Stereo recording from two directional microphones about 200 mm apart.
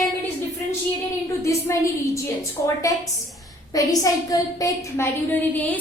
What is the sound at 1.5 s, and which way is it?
A woman's voice, 15° left (ahead or behind).